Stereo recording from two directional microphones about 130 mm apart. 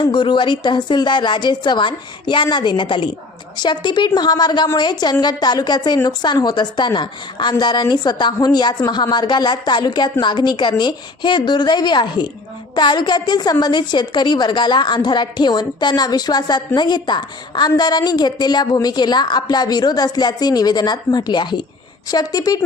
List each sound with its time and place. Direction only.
0.0 s a woman's voice: 35° left (ahead or behind)